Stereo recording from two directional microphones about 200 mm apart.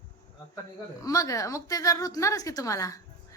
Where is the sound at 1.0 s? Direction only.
15° left (ahead or behind).